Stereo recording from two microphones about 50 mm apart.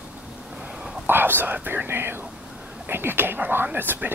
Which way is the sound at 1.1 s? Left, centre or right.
Right.